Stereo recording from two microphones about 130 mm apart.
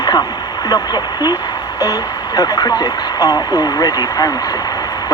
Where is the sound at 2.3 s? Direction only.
30° left (ahead or behind).